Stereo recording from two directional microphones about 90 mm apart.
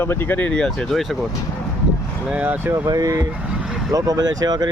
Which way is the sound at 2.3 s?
20° right (ahead or behind).